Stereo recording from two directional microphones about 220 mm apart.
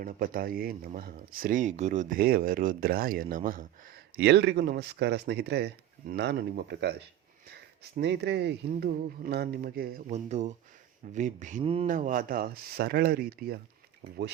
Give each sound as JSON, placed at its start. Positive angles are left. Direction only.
{"t": 0.0, "sound": "speech", "side_deg": -40}
{"t": 7.9, "sound": "speech", "side_deg": -50}
{"t": 10.1, "sound": "speech", "side_deg": -30}
{"t": 11.9, "sound": "speech", "side_deg": -40}